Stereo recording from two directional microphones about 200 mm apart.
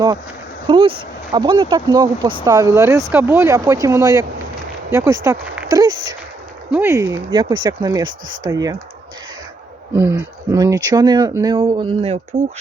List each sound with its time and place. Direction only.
0.7 s speech: 25° right (ahead or behind)
10.0 s speech: 10° right (ahead or behind); by 12.2 s 30° right (ahead or behind)